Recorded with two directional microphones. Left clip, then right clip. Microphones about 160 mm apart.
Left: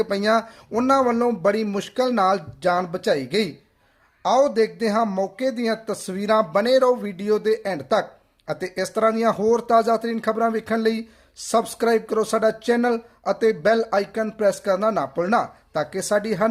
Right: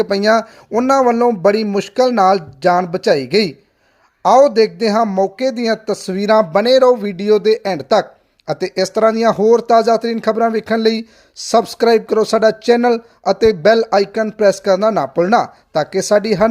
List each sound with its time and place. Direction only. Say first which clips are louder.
0.0 s speech: right 7 dB; 45° right (ahead or behind)